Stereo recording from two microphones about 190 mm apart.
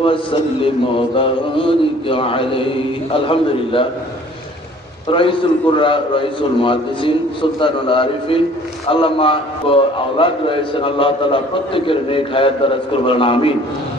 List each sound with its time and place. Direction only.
0.0 s a man's voice: 25° left (ahead or behind)
5.1 s a man's voice: 25° left (ahead or behind)